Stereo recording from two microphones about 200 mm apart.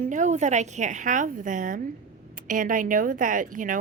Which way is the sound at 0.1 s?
35° right (ahead or behind).